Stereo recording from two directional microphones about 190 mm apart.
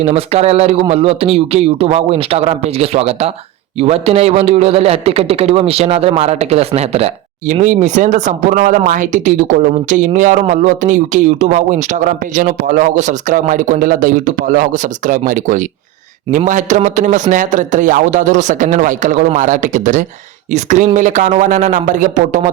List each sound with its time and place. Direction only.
0.0 s a man's voice: 35° right (ahead or behind)